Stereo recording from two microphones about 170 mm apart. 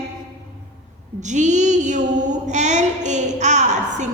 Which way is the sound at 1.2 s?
45° right (ahead or behind).